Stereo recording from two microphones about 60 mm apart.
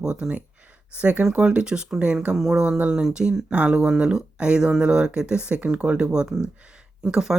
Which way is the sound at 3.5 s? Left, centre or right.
Centre.